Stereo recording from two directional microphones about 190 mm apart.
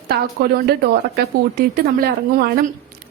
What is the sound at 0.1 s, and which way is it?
A woman's voice, 55° right (ahead or behind).